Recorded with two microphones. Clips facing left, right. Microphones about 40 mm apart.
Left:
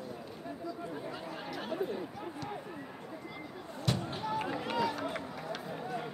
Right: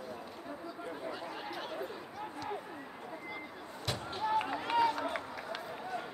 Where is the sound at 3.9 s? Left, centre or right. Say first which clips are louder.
Left 3 dB; centre.